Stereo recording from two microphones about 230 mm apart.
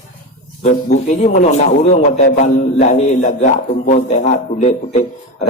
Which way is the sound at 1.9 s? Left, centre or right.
Left.